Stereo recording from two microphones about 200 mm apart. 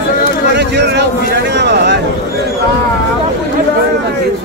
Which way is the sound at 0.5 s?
60° right (ahead or behind).